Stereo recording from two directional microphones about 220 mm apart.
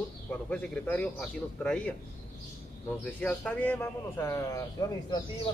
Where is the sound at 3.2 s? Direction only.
5° left (ahead or behind).